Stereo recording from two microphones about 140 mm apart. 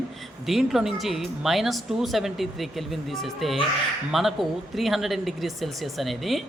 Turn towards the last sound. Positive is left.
turn(degrees=0)  # may be behind; listen again after turning